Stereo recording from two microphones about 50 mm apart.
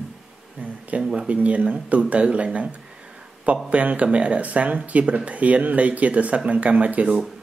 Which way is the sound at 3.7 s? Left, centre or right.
Right.